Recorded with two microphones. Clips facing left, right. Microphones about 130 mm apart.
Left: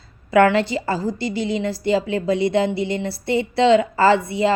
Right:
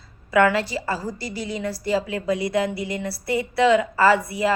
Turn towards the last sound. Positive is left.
turn(degrees=25)  # may be behind; listen again after turning